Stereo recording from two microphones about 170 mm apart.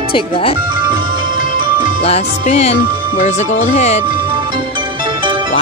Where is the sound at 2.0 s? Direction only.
35° left (ahead or behind).